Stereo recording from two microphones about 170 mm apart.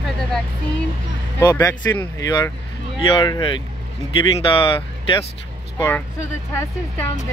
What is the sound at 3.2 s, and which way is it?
Speech, 30° left (ahead or behind).